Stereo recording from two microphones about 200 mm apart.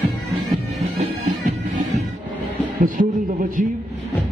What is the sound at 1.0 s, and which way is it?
Bagpipes, 40° right (ahead or behind).